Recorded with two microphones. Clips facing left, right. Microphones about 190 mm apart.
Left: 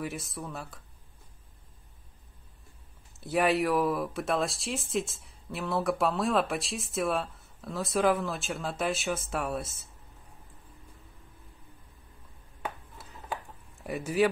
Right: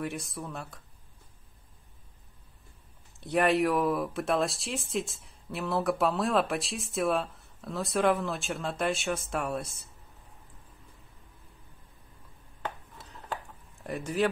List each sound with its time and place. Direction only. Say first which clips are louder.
0.0 s speech: right 1 dB; centre (ahead or behind)
3.2 s speech: right 1 dB; 5° left (ahead or behind)
12.6 s chopping: even; 10° left (ahead or behind)
13.8 s speech: left 2 dB; 10° left (ahead or behind)